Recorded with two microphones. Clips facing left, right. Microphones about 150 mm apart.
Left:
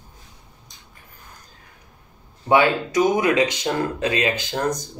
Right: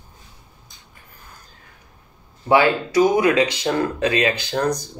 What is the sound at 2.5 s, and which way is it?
Speech, 20° left (ahead or behind).